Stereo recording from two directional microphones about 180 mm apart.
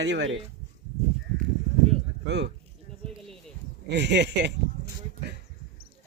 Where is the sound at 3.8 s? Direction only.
75° right (ahead or behind).